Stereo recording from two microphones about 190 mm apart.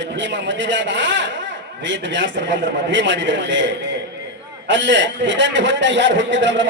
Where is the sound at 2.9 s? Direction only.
70° right (ahead or behind).